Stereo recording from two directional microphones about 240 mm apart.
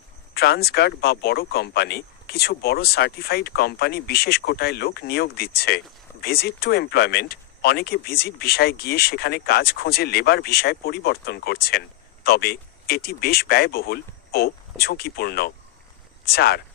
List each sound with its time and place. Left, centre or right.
0.3 s speech: left